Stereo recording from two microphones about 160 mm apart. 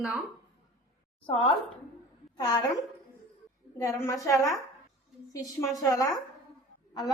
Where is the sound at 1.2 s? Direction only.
30° left (ahead or behind).